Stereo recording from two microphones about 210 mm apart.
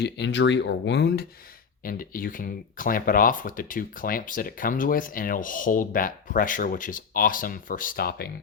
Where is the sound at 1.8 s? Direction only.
40° left (ahead or behind).